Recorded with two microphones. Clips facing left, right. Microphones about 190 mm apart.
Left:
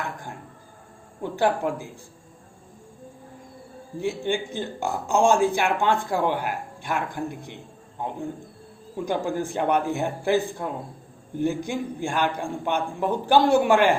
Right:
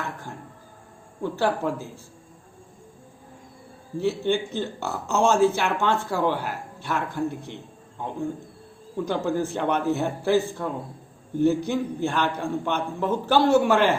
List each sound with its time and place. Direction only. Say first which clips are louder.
0.0 s dishes: left 1 dB; 15° left (ahead or behind)
1.2 s speech: left 1 dB; 15° left (ahead or behind)
4.0 s speech: right 2 dB; 15° left (ahead or behind)
9.0 s speech: right 1 dB; 15° left (ahead or behind)